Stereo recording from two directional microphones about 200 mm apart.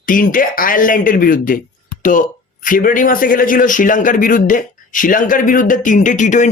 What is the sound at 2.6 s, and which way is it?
Speech, 45° left (ahead or behind).